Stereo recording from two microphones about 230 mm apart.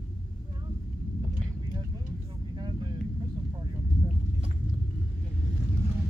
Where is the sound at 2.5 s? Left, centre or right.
Centre.